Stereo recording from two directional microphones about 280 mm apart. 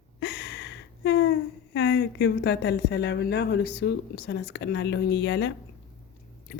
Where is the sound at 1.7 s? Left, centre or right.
Left.